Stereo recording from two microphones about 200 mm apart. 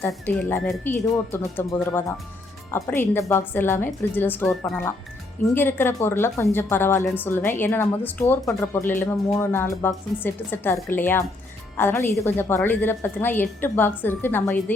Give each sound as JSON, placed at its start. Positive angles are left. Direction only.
{"t": 0.0, "sound": "a woman's voice", "side_deg": 10}